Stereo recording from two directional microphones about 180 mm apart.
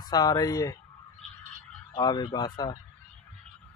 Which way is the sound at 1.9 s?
25° left (ahead or behind).